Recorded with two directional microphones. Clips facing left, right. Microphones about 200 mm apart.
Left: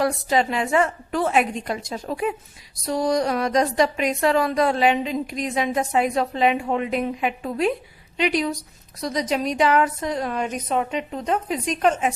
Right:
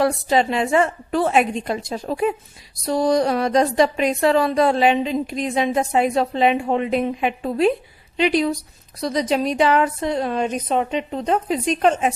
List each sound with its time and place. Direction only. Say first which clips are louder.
0.0 s speech: right 3 dB; 30° right (ahead or behind)